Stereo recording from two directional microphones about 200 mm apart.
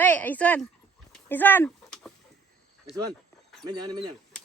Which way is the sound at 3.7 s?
20° right (ahead or behind).